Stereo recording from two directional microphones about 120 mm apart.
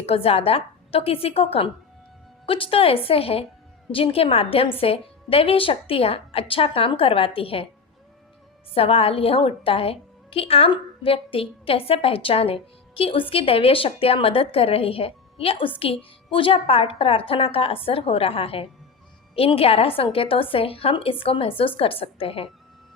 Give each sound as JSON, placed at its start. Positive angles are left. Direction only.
{"t": 0.0, "sound": "a woman's voice", "side_deg": 55}
{"t": 8.7, "sound": "a woman's voice", "side_deg": 55}